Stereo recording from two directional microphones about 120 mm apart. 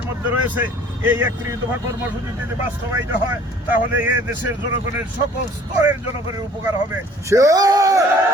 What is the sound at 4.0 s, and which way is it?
Speech, 15° right (ahead or behind).